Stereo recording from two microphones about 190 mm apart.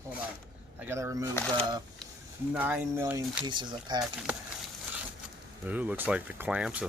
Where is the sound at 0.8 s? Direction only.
15° right (ahead or behind).